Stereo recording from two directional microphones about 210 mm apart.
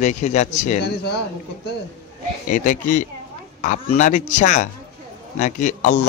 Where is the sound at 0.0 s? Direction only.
35° left (ahead or behind).